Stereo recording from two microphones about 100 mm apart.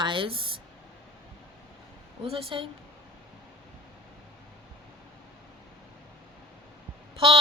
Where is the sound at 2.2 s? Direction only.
65° right (ahead or behind).